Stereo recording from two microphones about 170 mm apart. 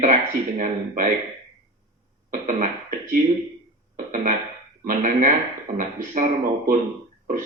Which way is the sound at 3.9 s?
45° right (ahead or behind).